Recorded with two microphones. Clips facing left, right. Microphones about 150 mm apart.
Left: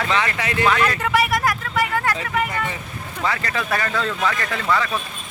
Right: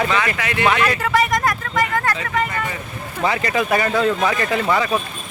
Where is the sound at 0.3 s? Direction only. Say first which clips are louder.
Even; 30° left (ahead or behind).